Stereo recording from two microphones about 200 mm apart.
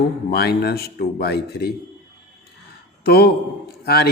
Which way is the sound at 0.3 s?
55° left (ahead or behind).